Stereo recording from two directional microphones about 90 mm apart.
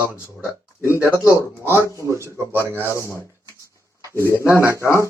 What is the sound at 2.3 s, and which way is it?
Speech, 20° right (ahead or behind).